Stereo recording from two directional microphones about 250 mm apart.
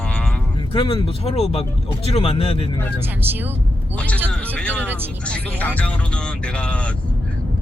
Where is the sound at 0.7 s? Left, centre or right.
Centre.